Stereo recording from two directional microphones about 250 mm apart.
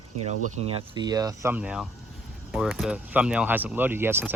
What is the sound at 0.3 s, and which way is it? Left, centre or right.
Speech, right.